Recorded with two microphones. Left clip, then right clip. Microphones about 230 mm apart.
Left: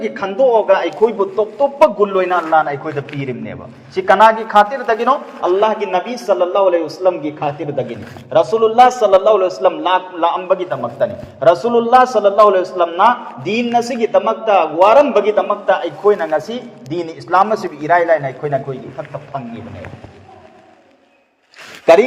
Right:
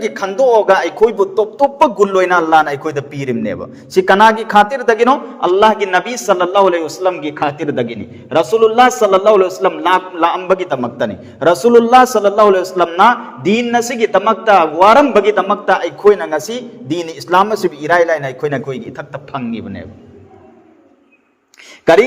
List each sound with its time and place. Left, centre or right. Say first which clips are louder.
0.0 s speech: right 1 dB; right